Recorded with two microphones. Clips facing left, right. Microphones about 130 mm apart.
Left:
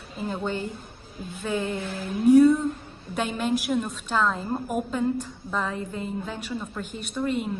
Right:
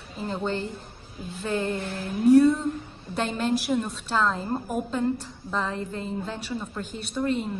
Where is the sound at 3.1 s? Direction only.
10° left (ahead or behind).